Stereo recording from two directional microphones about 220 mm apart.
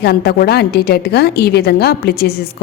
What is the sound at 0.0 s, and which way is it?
A woman's voice, 45° left (ahead or behind).